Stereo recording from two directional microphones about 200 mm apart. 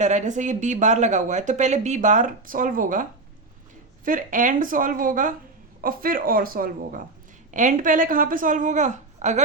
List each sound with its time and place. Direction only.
0.0 s speech: 35° right (ahead or behind)